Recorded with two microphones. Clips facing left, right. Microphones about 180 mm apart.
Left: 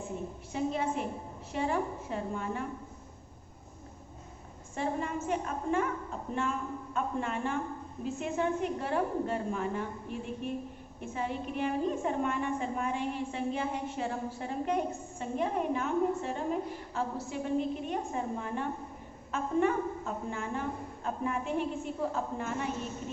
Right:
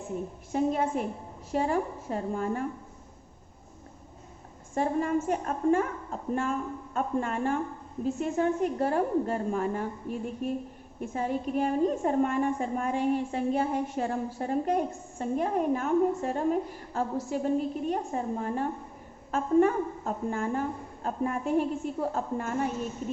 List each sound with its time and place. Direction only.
0.5 s a woman's voice: 50° right (ahead or behind)
4.7 s a woman's voice: 45° right (ahead or behind)